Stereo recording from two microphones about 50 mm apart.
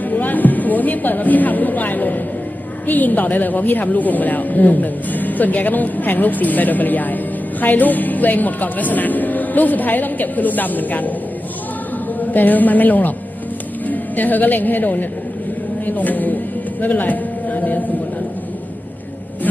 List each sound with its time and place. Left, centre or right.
0.1 s a woman's voice: left
12.2 s a woman's voice: left
16.8 s a sound: left